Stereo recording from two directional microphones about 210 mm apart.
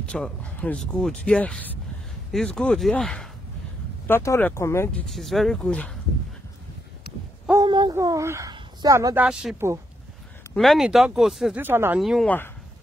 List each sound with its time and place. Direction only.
0.0 s speech: 5° left (ahead or behind)
7.6 s speech: 20° right (ahead or behind)
12.0 s speech: centre (ahead or behind)